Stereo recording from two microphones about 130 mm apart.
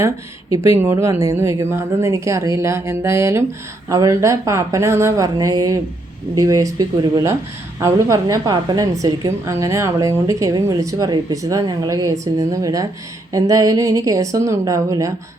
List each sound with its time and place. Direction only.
0.5 s a woman's voice: 20° right (ahead or behind)